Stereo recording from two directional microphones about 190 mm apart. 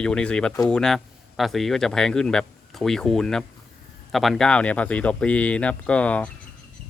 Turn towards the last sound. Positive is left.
turn(degrees=5)  # may be behind; listen again after turning